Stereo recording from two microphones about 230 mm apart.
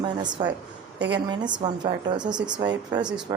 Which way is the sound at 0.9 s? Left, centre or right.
Right.